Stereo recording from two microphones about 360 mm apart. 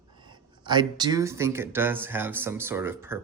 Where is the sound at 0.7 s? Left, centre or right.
Centre.